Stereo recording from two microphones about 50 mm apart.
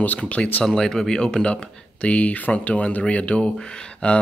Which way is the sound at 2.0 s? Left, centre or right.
Left.